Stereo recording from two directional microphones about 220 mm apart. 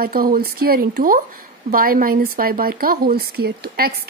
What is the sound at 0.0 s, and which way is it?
A woman's voice, 40° right (ahead or behind).